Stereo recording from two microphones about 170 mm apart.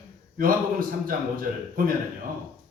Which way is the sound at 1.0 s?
55° right (ahead or behind).